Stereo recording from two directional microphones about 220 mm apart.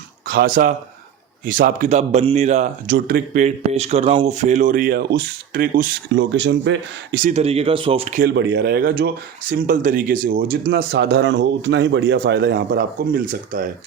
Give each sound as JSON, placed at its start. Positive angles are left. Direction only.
{"t": 0.3, "sound": "speech", "side_deg": -40}
{"t": 8.2, "sound": "speech", "side_deg": -50}